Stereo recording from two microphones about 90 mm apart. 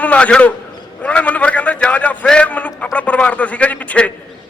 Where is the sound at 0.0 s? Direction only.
15° left (ahead or behind).